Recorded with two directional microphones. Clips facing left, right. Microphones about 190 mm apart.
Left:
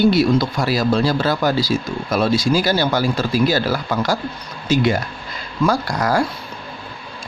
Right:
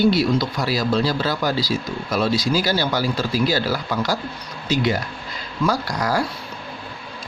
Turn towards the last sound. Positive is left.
turn(degrees=50)  # may be behind; listen again after turning